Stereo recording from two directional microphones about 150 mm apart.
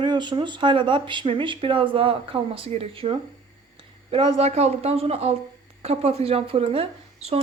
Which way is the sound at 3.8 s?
40° right (ahead or behind).